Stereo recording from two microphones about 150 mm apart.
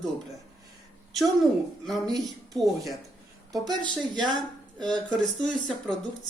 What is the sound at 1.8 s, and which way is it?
A woman's voice, centre (ahead or behind).